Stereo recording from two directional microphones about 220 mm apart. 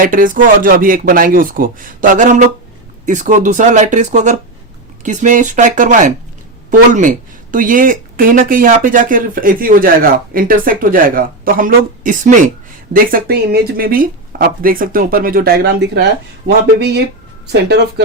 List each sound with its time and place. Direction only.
0.0 s speech: 40° right (ahead or behind)